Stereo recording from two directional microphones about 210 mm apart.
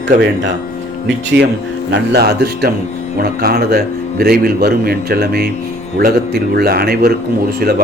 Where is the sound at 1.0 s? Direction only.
50° right (ahead or behind).